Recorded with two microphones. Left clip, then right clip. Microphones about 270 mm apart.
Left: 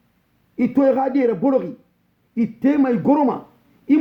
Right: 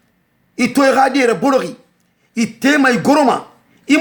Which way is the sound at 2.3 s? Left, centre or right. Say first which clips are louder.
Right 5 dB; centre.